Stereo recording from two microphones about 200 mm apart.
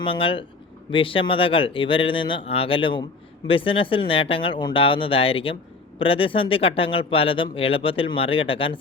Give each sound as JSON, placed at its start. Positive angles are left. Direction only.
{"t": 0.0, "sound": "speech", "side_deg": 25}